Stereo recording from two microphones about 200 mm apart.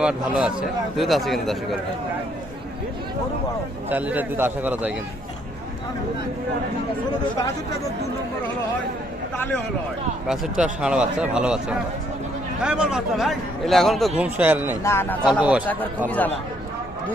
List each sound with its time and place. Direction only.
0.0 s a man's voice: 5° right (ahead or behind)
3.9 s a man's voice: 10° right (ahead or behind)
7.3 s speech: 15° left (ahead or behind)
10.2 s a man's voice: centre (ahead or behind)
12.6 s a man's voice: 5° right (ahead or behind)
14.8 s speech: 10° left (ahead or behind)
15.2 s a man's voice: 5° right (ahead or behind)